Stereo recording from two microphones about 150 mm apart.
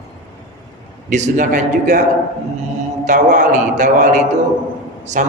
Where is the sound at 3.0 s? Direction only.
55° right (ahead or behind).